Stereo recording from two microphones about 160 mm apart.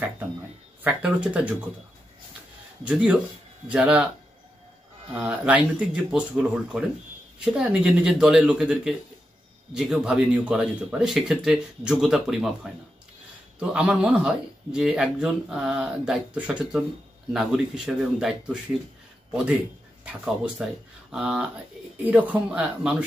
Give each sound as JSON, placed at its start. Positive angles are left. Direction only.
{"t": 0.8, "sound": "speech", "side_deg": -10}
{"t": 2.8, "sound": "speech", "side_deg": -10}
{"t": 5.1, "sound": "speech", "side_deg": -5}